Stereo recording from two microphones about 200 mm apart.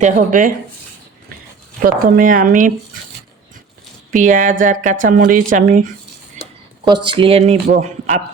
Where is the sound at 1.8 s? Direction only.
45° right (ahead or behind).